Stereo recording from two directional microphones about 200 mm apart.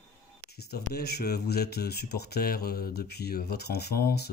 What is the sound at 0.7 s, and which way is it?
Speech, 55° left (ahead or behind).